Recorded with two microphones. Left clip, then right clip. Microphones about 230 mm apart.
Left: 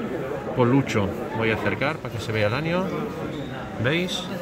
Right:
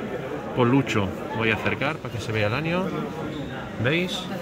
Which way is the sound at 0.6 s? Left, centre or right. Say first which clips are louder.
Even; centre.